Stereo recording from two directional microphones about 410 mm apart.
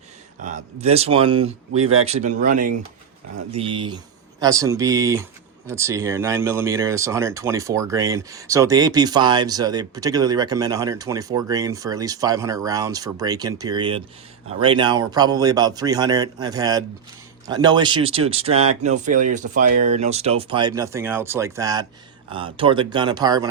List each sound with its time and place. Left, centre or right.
0.4 s speech: centre